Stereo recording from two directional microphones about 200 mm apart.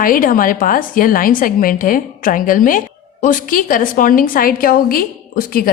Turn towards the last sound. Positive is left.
turn(degrees=45)  # may be behind; listen again after turning